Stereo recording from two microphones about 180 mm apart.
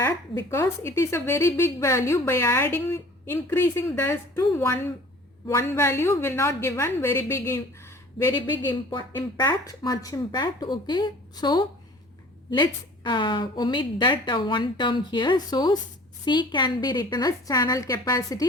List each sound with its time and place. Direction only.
0.5 s a woman's voice: 15° left (ahead or behind)
8.9 s a woman's voice: 25° left (ahead or behind)